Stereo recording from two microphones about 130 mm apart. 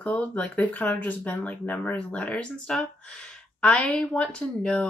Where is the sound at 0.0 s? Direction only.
10° left (ahead or behind).